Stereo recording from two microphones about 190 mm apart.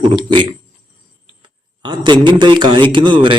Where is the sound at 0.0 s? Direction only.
25° right (ahead or behind).